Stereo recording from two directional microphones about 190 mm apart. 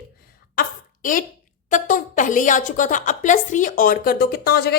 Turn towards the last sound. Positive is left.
turn(degrees=55)  # may be behind; listen again after turning